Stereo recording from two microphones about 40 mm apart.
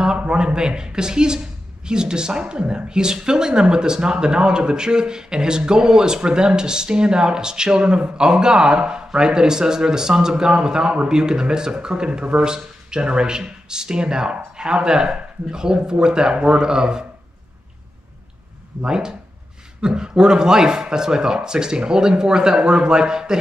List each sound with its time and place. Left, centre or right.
0.0 s a sound: right
1.9 s speech: centre
18.9 s speech: centre